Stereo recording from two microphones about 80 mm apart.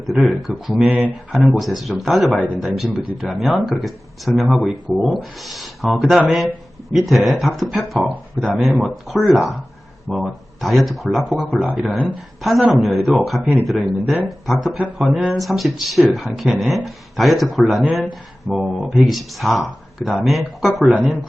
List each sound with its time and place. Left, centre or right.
0.0 s speech: centre